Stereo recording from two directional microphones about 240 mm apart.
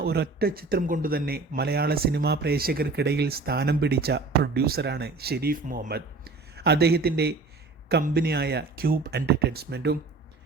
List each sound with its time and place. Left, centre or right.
0.0 s speech: right